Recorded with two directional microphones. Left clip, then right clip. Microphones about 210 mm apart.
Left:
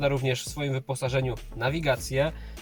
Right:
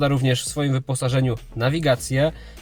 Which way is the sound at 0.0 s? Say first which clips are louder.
Right 5 dB; 55° right (ahead or behind).